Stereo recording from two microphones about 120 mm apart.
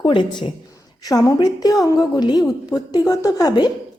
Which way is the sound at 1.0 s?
30° left (ahead or behind).